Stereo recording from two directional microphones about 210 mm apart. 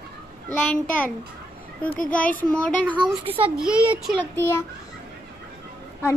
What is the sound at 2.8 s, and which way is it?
Speech, 5° right (ahead or behind).